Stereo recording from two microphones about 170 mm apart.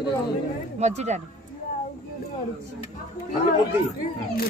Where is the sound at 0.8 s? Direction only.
40° right (ahead or behind).